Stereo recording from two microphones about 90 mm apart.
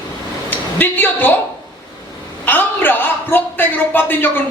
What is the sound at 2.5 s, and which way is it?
A man's voice, 20° left (ahead or behind).